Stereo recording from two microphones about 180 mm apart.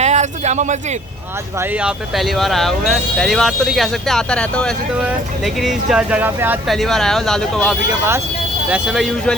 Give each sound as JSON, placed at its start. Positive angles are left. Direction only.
{"t": 0.0, "sound": "a sound", "side_deg": -40}
{"t": 1.5, "sound": "speech", "side_deg": -5}
{"t": 6.7, "sound": "speech", "side_deg": 0}